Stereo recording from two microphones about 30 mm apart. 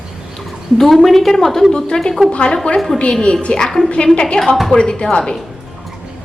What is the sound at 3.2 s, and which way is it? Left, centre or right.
Speech, left.